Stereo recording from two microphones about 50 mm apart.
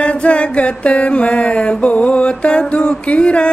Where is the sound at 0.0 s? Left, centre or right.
Left.